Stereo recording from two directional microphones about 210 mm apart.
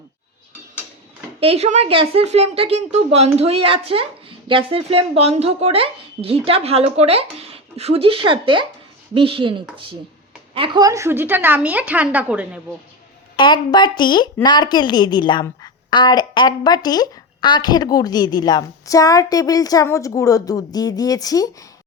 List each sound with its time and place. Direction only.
1.4 s a woman's voice: 30° right (ahead or behind); by 12.5 s 5° right (ahead or behind)
13.3 s a woman's voice: 20° left (ahead or behind)